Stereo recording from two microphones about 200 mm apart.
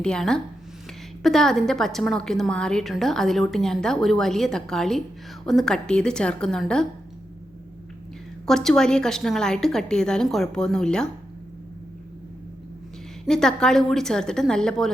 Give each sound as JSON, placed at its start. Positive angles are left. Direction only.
{"t": 0.0, "sound": "a woman's voice", "side_deg": 5}
{"t": 8.4, "sound": "a woman's voice", "side_deg": 0}
{"t": 13.2, "sound": "a woman's voice", "side_deg": 5}